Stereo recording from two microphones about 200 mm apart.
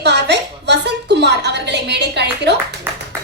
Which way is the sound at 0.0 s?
60° right (ahead or behind).